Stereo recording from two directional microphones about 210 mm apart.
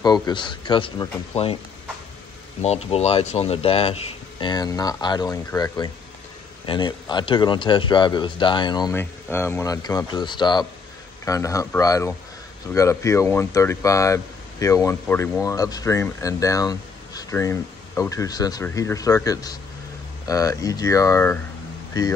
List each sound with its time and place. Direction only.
0.0 s a man's voice: 20° left (ahead or behind)
2.6 s a man's voice: 30° left (ahead or behind); by 21.4 s 10° left (ahead or behind)